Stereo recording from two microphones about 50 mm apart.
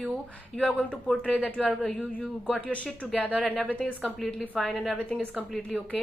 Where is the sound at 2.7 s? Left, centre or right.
Left.